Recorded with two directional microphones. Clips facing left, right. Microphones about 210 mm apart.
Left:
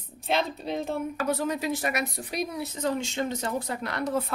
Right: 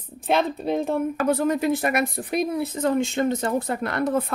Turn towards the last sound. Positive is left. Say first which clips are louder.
# right 5 dB
turn(degrees=-55)  # may be behind; listen again after turning